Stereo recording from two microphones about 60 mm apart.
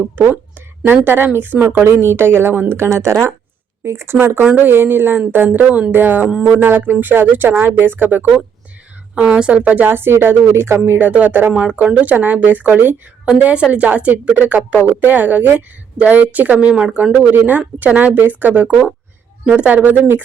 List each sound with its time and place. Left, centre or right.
0.2 s speech: right
4.4 s a woman's voice: right
4.7 s speech: right
5.2 s a woman's voice: right
9.1 s a woman's voice: centre
9.6 s speech: right
11.1 s a woman's voice: right
13.2 s a woman's voice: centre